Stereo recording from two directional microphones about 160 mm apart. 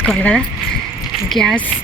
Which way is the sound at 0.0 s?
5° left (ahead or behind).